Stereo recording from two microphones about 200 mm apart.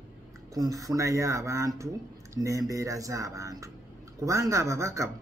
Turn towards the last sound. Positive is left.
turn(degrees=-15)  # may be behind; listen again after turning